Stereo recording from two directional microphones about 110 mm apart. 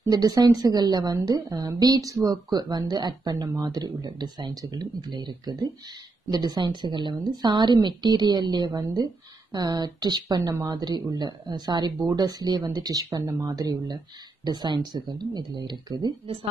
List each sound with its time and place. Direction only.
0.1 s a woman's voice: 35° right (ahead or behind)